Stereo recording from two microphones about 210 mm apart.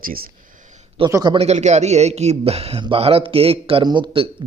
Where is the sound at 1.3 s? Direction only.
30° right (ahead or behind).